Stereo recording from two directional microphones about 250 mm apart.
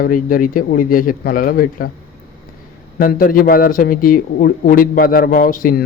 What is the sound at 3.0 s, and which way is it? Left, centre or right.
Speech, left.